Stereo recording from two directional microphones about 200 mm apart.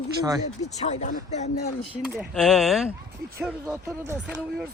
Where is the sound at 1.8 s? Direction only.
5° right (ahead or behind).